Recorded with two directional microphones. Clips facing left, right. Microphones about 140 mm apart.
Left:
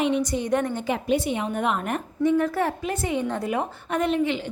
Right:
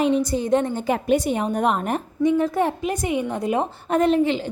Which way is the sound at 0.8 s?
45° right (ahead or behind).